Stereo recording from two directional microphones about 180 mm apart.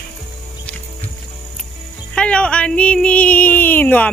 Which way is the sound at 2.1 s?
5° left (ahead or behind).